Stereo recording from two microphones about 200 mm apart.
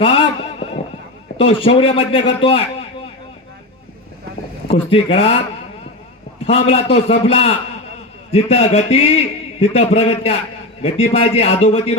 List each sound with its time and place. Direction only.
0.0 s a sound: 25° left (ahead or behind)
1.4 s a man's voice: 30° left (ahead or behind)
4.7 s a man's voice: 30° left (ahead or behind)
6.4 s a man's voice: 30° left (ahead or behind)